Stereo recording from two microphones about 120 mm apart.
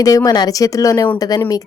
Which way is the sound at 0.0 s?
30° left (ahead or behind).